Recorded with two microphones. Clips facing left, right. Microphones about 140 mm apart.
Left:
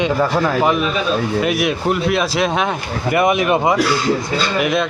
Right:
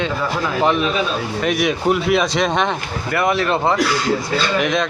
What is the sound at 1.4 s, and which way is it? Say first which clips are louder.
Speech: even; centre (ahead or behind).